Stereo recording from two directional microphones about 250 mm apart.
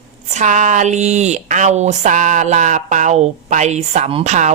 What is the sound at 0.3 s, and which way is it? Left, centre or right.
Speech, right.